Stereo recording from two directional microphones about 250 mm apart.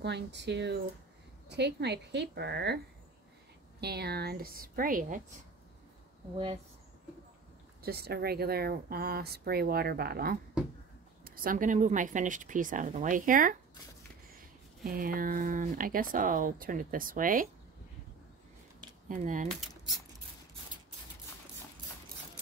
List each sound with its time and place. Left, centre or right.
0.0 s speech: right
3.8 s speech: right
7.8 s speech: right
19.0 s speech: right